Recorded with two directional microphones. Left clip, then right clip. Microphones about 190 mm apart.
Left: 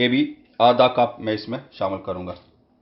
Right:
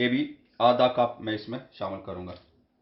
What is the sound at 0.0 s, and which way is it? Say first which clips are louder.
Speech: left 6 dB; 40° left (ahead or behind).